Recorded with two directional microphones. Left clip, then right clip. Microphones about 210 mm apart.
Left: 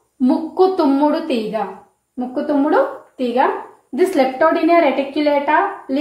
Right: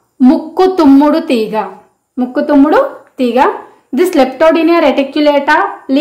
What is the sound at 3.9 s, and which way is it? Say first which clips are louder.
A woman's voice: right 6 dB; 45° right (ahead or behind).